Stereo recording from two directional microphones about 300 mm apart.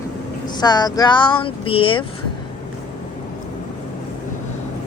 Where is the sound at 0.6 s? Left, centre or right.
Centre.